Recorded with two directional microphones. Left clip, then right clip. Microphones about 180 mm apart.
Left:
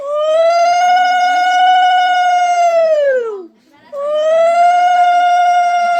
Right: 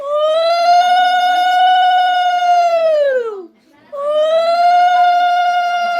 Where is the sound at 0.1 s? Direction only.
10° left (ahead or behind).